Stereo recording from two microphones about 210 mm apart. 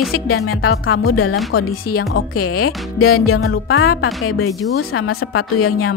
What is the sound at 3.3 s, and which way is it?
Speech, 75° left (ahead or behind).